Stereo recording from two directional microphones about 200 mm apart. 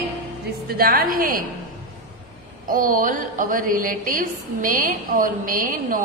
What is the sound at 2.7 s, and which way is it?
A woman's voice, 45° right (ahead or behind).